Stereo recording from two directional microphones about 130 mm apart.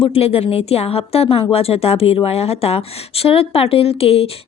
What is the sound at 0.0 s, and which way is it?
A woman's voice, 45° left (ahead or behind).